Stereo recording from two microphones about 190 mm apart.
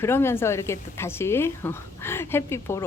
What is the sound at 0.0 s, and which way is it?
A woman's voice, 15° left (ahead or behind).